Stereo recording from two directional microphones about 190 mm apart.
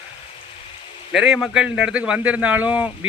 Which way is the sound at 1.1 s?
5° right (ahead or behind).